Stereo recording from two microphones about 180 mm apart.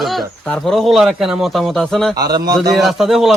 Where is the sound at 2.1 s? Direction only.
20° right (ahead or behind).